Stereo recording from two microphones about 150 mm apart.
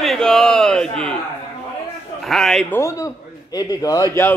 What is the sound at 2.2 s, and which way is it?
Speech, 5° left (ahead or behind).